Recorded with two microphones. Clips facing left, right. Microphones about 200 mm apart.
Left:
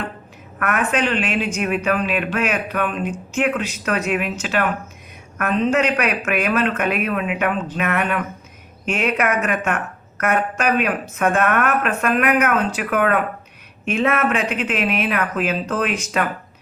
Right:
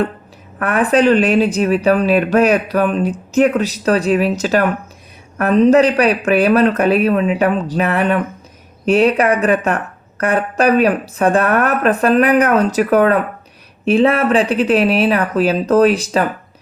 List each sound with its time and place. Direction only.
0.6 s speech: 35° right (ahead or behind)